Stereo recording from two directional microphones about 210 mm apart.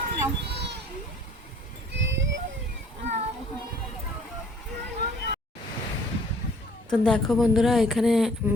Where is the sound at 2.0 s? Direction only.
60° right (ahead or behind).